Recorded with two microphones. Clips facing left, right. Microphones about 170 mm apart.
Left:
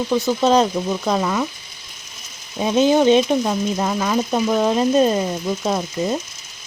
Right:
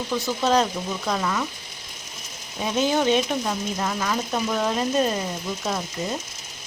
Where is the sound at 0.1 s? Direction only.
20° left (ahead or behind).